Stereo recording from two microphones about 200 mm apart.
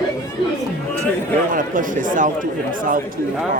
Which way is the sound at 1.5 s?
40° right (ahead or behind).